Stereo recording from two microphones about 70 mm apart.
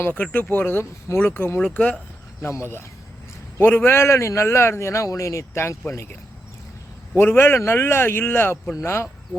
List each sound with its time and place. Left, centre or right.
0.1 s speech: left
1.6 s speech: centre
3.6 s a man's voice: left
7.2 s a man's voice: left